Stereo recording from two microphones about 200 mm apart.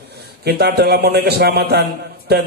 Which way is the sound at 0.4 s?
55° right (ahead or behind).